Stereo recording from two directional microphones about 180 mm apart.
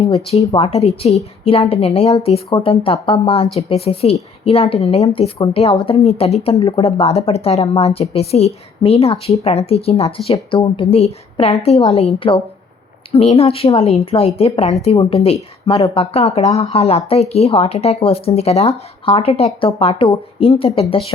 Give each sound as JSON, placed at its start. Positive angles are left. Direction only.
{"t": 0.3, "sound": "speech", "side_deg": 35}